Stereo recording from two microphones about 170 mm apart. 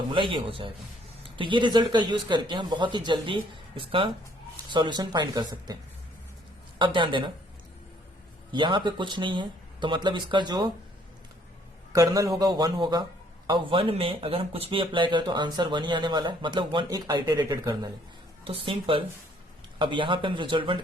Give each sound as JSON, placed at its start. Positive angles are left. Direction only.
{"t": 0.1, "sound": "speech", "side_deg": -30}
{"t": 6.7, "sound": "speech", "side_deg": -30}
{"t": 8.5, "sound": "speech", "side_deg": -25}
{"t": 11.9, "sound": "speech", "side_deg": -20}